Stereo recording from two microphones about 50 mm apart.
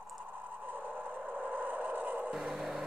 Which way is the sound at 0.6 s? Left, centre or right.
Right.